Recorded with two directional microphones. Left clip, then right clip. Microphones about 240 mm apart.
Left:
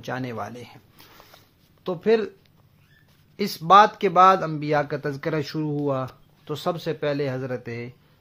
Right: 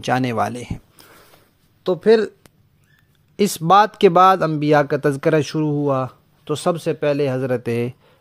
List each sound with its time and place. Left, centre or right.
0.0 s speech: right
1.8 s speech: right